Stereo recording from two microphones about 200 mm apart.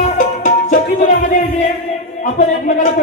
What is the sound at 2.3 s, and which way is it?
Speech, 40° left (ahead or behind).